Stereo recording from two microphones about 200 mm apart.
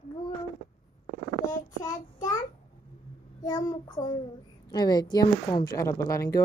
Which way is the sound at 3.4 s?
20° left (ahead or behind).